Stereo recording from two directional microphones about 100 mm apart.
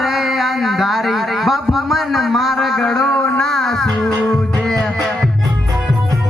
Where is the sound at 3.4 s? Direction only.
Centre (ahead or behind).